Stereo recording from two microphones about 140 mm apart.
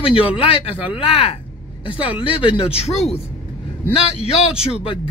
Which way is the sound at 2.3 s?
45° left (ahead or behind).